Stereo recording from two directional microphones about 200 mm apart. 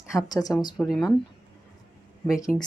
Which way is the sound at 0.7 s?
Centre (ahead or behind).